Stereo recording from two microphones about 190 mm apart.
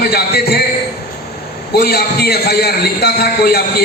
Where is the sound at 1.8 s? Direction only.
55° left (ahead or behind).